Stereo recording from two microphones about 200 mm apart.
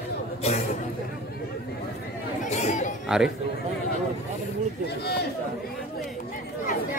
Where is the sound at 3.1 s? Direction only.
5° right (ahead or behind).